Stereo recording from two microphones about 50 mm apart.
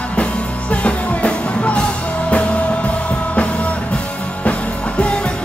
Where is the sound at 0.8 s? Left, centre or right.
Left.